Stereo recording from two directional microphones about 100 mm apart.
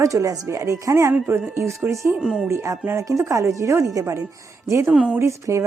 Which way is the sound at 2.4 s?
30° right (ahead or behind).